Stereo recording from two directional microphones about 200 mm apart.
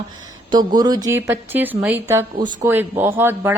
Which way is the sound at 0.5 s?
20° right (ahead or behind).